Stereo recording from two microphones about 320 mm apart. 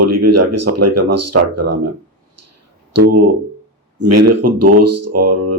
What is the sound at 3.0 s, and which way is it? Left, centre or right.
Speech, right.